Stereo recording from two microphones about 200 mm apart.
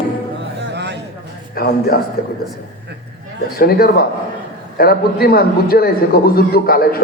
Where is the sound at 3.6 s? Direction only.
50° left (ahead or behind).